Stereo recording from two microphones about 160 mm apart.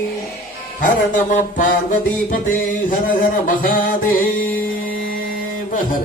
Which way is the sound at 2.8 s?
60° left (ahead or behind).